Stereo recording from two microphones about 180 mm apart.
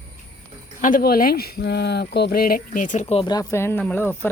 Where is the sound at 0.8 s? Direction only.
55° left (ahead or behind).